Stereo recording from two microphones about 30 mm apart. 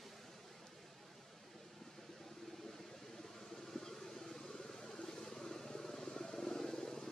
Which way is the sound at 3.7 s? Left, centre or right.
Centre.